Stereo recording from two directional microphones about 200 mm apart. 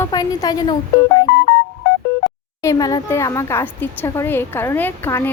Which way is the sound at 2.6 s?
15° left (ahead or behind).